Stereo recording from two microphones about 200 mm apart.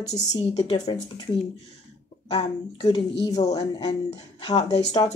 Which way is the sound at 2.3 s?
25° left (ahead or behind).